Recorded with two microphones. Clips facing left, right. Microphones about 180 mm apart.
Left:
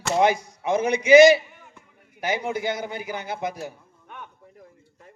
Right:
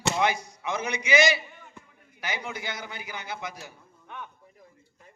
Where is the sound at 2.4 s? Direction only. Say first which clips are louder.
Left 9 dB; 50° left (ahead or behind).